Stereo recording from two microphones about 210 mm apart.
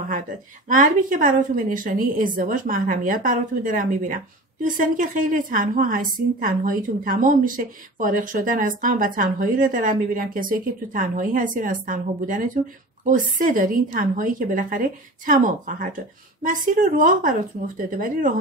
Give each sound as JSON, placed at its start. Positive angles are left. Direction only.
{"t": 0.7, "sound": "a woman's voice", "side_deg": -40}